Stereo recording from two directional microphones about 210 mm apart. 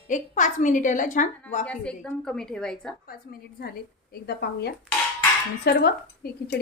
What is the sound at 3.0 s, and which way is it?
Speech, 45° left (ahead or behind).